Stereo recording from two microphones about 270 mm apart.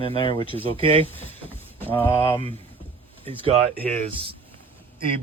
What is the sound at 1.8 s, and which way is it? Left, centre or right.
Speech, centre.